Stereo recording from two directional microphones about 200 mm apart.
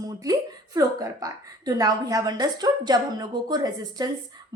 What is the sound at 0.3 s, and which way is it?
A woman's voice, 20° right (ahead or behind).